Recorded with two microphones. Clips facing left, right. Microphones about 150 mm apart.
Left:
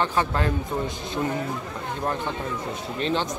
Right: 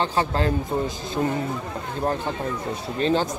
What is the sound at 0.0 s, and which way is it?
Speech, 30° right (ahead or behind).